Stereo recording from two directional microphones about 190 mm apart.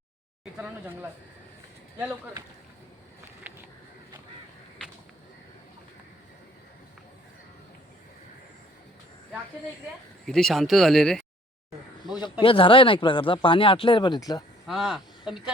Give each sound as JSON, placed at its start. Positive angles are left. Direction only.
{"t": 0.5, "sound": "speech", "side_deg": -10}
{"t": 10.2, "sound": "speech", "side_deg": 0}
{"t": 12.0, "sound": "speech", "side_deg": 20}
{"t": 14.7, "sound": "speech", "side_deg": 0}